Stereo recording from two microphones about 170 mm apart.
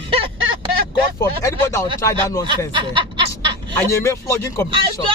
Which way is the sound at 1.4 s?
15° left (ahead or behind).